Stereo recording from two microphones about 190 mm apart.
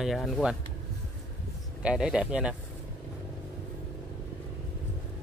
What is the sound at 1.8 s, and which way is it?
Speech, 5° right (ahead or behind).